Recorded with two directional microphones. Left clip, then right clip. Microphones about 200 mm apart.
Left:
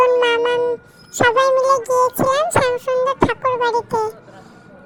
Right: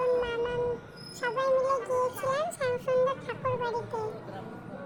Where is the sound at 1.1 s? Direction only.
50° left (ahead or behind).